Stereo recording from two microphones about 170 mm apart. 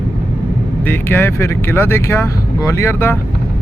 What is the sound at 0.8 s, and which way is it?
Speech, 15° left (ahead or behind).